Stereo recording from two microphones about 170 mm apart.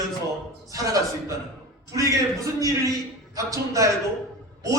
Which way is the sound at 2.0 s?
20° right (ahead or behind).